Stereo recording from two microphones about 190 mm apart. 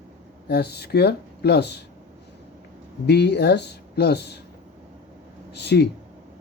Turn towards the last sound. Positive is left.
turn(degrees=60)  # may be behind; listen again after turning